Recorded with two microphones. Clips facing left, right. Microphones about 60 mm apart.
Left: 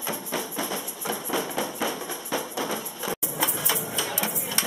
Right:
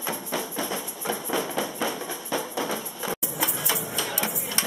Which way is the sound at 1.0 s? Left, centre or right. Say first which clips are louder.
Right 1 dB; centre.